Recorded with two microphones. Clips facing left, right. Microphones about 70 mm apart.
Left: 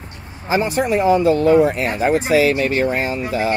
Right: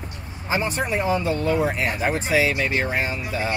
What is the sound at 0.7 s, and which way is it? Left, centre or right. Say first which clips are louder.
Speech: left 7 dB; left.